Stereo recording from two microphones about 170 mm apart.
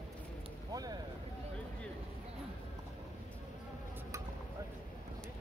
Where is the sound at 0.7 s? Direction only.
20° right (ahead or behind).